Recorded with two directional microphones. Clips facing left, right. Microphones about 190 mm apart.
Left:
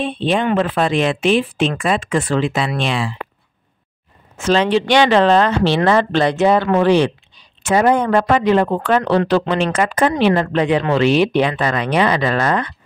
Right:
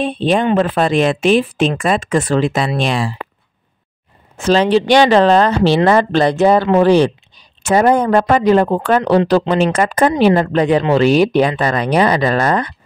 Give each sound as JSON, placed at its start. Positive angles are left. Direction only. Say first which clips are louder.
{"t": 0.0, "sound": "speech", "louder": "right 3 dB", "side_deg": -40}
{"t": 4.4, "sound": "speech", "louder": "right 3 dB", "side_deg": -35}